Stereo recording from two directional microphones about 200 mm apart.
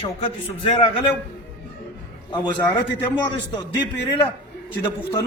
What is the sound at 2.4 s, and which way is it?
A man's voice, 15° left (ahead or behind).